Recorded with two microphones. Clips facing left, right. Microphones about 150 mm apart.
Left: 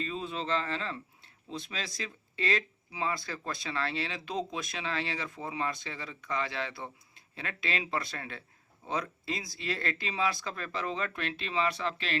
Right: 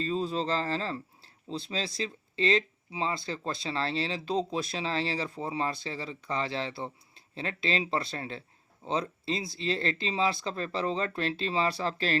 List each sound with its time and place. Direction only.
0.0 s speech: 35° right (ahead or behind)